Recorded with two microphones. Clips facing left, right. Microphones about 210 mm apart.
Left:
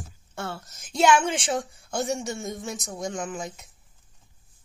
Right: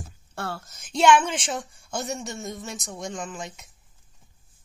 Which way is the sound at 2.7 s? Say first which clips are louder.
Left 2 dB; 5° left (ahead or behind).